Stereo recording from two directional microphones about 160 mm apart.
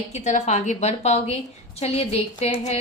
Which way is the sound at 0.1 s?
45° left (ahead or behind).